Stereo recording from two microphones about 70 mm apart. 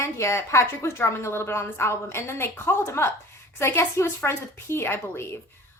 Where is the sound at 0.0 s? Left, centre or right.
Left.